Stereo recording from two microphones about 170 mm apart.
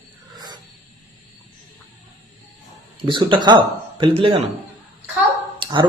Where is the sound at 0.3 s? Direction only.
25° right (ahead or behind).